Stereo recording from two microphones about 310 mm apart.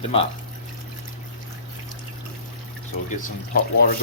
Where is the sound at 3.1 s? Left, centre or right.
Left.